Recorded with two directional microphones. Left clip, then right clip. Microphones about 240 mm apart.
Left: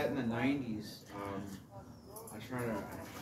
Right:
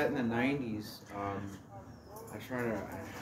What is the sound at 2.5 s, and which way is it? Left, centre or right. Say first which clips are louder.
Speech: right 4 dB; right.